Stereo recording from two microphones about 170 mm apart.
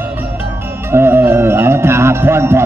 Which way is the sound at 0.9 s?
15° right (ahead or behind).